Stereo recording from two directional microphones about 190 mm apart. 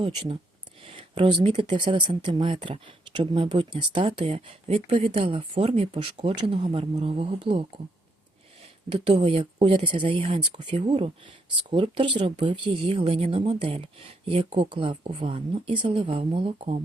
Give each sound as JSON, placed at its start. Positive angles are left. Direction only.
{"t": 0.0, "sound": "speech", "side_deg": -25}
{"t": 8.9, "sound": "speech", "side_deg": -30}